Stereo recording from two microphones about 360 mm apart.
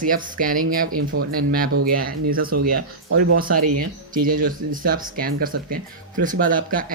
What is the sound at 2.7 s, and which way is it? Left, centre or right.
Speech, right.